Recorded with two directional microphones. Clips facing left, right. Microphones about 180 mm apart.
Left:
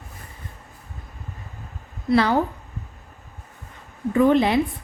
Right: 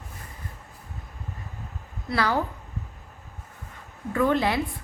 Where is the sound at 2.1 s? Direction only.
25° left (ahead or behind).